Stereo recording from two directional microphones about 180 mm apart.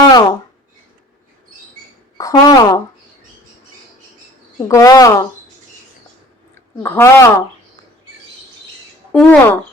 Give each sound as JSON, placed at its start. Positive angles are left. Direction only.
{"t": 0.1, "sound": "a sound", "side_deg": 20}
{"t": 2.1, "sound": "speech", "side_deg": 20}
{"t": 4.5, "sound": "a woman's voice", "side_deg": 20}
{"t": 6.5, "sound": "a woman's voice", "side_deg": 10}
{"t": 9.1, "sound": "speech", "side_deg": 10}